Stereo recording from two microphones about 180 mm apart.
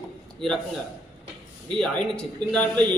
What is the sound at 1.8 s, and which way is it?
Speech, 5° left (ahead or behind).